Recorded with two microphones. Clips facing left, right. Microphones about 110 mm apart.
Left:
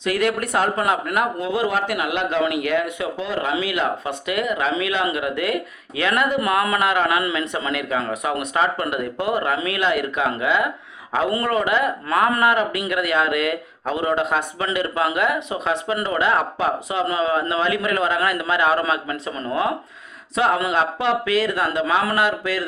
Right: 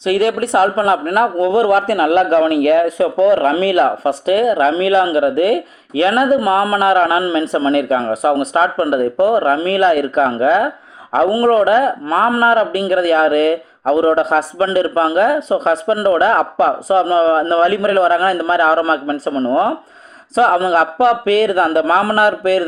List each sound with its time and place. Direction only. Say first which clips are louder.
0.0 s a man's voice: right 6 dB; 30° right (ahead or behind)